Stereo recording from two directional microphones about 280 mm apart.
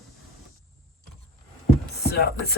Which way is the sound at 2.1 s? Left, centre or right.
Left.